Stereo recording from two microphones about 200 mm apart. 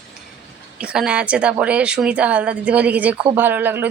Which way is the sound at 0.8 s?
5° right (ahead or behind).